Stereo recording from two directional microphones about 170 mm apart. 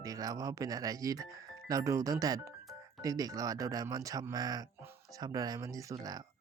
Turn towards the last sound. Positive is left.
turn(degrees=-20)  # may be behind; listen again after turning